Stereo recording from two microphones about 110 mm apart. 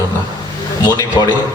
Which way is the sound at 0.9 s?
30° left (ahead or behind).